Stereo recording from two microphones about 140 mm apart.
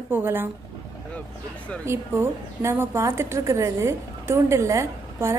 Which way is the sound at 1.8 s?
20° right (ahead or behind).